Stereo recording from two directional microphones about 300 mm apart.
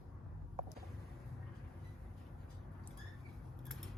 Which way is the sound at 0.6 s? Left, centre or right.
Right.